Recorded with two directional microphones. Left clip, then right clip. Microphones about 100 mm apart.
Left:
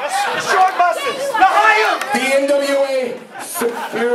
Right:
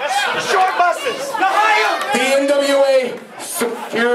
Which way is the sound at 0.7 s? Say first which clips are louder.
Even; 15° left (ahead or behind).